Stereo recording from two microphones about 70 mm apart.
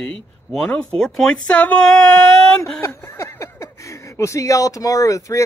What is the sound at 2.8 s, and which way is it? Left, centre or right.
Speech, left.